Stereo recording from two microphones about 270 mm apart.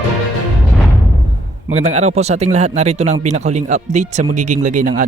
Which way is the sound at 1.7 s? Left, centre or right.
Right.